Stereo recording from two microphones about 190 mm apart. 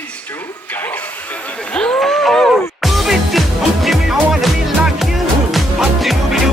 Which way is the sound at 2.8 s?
Centre (ahead or behind).